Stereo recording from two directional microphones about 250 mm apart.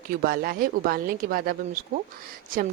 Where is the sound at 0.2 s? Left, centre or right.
Right.